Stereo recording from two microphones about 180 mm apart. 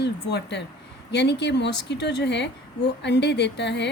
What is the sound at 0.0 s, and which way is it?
A woman's voice, 70° left (ahead or behind).